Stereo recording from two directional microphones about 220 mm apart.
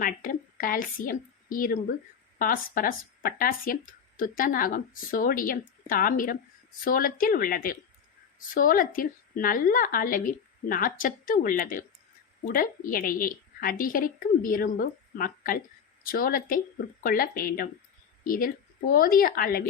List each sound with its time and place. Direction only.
0.0 s a woman's voice: 40° left (ahead or behind)